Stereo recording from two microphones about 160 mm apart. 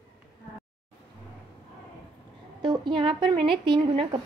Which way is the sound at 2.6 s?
30° right (ahead or behind).